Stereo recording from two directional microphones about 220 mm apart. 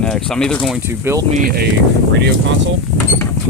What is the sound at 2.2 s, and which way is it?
Speech, 55° right (ahead or behind).